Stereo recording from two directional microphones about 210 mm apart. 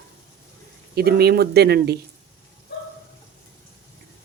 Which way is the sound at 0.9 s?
50° right (ahead or behind).